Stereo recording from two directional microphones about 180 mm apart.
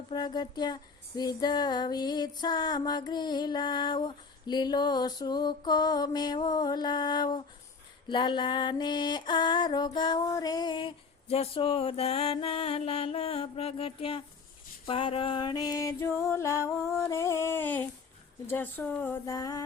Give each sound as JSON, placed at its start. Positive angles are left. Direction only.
{"t": 0.1, "sound": "music", "side_deg": 25}
{"t": 17.1, "sound": "speech", "side_deg": 15}